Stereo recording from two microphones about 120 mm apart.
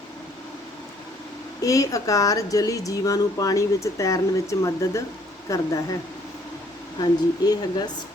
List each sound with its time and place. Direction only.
1.6 s speech: 30° left (ahead or behind)
7.0 s speech: 35° left (ahead or behind)